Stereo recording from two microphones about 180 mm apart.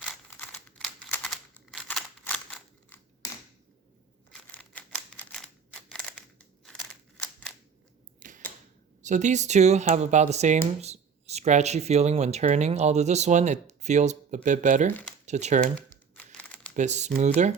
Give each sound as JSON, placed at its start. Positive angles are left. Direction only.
{"t": 0.3, "sound": "a sound", "side_deg": 10}
{"t": 0.8, "sound": "camera", "side_deg": 5}
{"t": 4.3, "sound": "scissors", "side_deg": 10}
{"t": 5.7, "sound": "a sound", "side_deg": 5}
{"t": 6.7, "sound": "scissors", "side_deg": 5}
{"t": 8.2, "sound": "typewriter", "side_deg": -45}
{"t": 9.0, "sound": "speech", "side_deg": -40}
{"t": 15.7, "sound": "crumpling", "side_deg": 5}
{"t": 16.7, "sound": "speech", "side_deg": -40}